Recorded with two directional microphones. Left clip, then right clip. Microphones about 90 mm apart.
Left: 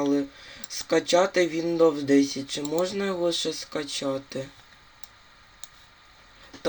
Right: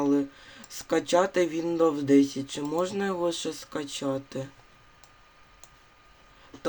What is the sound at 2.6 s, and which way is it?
Speech, 55° right (ahead or behind).